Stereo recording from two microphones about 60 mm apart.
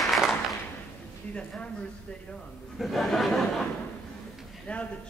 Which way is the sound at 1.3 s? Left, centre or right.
Centre.